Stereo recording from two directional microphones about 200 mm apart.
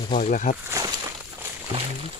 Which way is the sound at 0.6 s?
15° right (ahead or behind).